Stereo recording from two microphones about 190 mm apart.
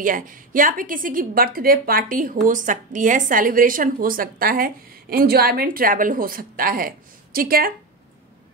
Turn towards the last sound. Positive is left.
turn(degrees=-50)  # may be behind; listen again after turning